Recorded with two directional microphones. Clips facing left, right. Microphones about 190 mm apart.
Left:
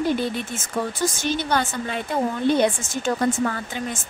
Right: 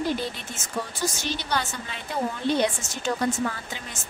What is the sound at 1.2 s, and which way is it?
Speech, 50° left (ahead or behind).